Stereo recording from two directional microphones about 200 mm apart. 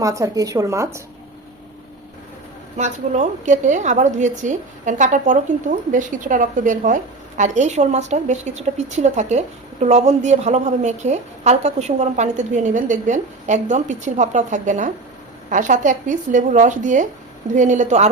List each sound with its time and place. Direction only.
0.0 s speech: 15° right (ahead or behind)
2.7 s a woman's voice: 35° right (ahead or behind)